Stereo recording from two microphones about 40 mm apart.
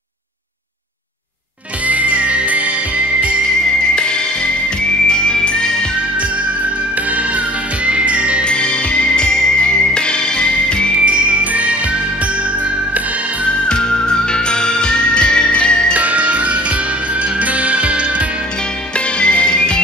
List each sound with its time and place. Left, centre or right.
1.9 s music: right
3.9 s music: left
7.2 s music: right
8.5 s music: left
11.0 s jingle bell: right
13.5 s music: left
15.9 s music: right
18.9 s music: left